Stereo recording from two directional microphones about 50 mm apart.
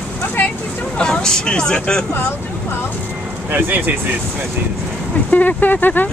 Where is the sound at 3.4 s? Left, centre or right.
Right.